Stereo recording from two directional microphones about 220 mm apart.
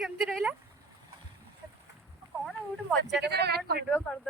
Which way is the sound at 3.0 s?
50° right (ahead or behind).